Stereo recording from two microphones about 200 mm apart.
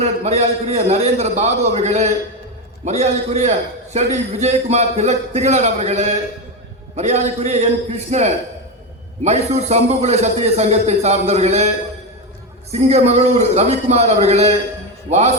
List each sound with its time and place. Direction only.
0.0 s a man's voice: 30° right (ahead or behind)
12.7 s a man's voice: 30° right (ahead or behind)